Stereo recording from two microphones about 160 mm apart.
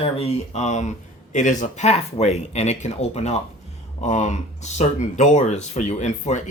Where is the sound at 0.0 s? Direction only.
40° left (ahead or behind).